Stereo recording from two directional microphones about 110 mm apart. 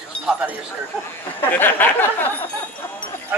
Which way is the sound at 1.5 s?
15° left (ahead or behind).